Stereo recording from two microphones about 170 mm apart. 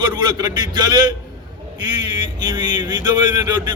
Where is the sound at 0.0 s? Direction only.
25° right (ahead or behind).